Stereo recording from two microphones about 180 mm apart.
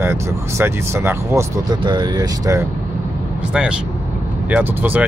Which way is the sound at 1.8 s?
25° right (ahead or behind).